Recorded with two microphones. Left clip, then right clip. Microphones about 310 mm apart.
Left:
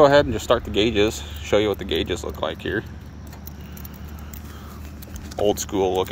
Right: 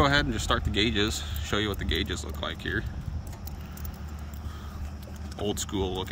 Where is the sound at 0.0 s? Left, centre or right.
Centre.